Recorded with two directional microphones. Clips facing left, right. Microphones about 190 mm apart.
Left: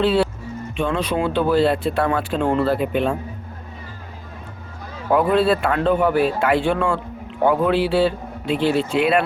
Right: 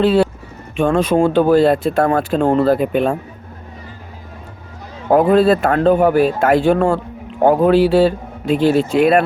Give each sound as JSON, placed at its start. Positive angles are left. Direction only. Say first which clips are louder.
{"t": 0.0, "sound": "speech", "louder": "right 4 dB", "side_deg": -45}
{"t": 5.3, "sound": "speech", "louder": "right 5 dB", "side_deg": -45}